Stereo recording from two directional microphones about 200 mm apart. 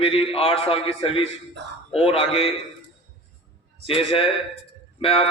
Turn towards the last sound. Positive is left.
turn(degrees=30)  # may be behind; listen again after turning